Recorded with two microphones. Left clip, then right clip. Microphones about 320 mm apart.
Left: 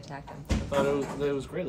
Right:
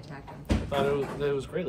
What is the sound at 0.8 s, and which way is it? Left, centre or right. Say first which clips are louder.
Speech: even; centre.